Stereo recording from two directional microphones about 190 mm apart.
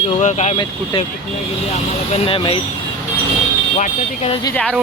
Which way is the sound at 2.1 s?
30° left (ahead or behind).